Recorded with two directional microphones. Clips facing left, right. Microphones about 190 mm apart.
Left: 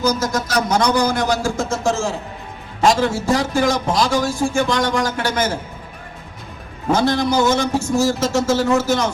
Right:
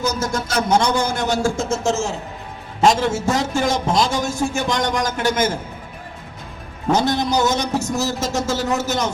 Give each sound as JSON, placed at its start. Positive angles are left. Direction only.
{"t": 0.0, "sound": "a man's voice", "side_deg": -25}
{"t": 6.9, "sound": "a man's voice", "side_deg": -20}